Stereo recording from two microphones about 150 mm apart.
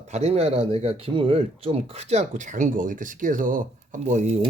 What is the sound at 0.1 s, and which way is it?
Speech, 45° right (ahead or behind).